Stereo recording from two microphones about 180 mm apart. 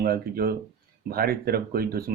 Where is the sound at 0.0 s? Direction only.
55° right (ahead or behind).